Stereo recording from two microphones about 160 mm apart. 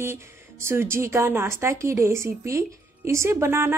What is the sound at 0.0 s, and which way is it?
A woman's voice, 15° right (ahead or behind).